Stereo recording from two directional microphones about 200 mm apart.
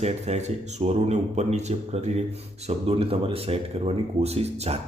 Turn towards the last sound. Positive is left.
turn(degrees=-30)  # may be behind; listen again after turning